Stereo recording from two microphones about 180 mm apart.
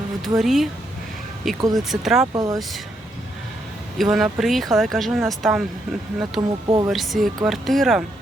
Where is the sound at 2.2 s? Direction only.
20° right (ahead or behind).